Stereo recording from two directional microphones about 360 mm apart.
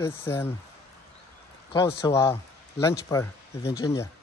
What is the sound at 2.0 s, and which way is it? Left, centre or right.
Speech, centre.